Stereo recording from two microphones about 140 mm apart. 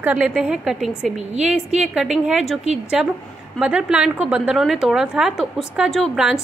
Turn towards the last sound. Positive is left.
turn(degrees=-5)  # may be behind; listen again after turning